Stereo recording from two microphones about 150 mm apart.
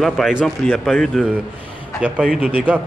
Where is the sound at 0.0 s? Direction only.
Centre (ahead or behind).